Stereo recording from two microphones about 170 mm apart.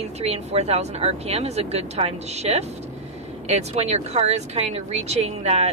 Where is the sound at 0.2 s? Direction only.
40° right (ahead or behind).